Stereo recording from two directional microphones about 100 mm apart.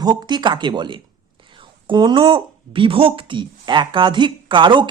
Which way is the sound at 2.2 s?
65° right (ahead or behind).